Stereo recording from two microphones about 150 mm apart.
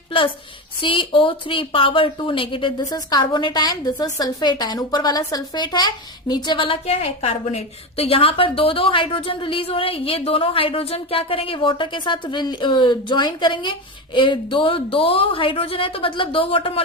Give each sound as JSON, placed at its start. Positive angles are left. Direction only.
{"t": 0.8, "sound": "speech", "side_deg": 35}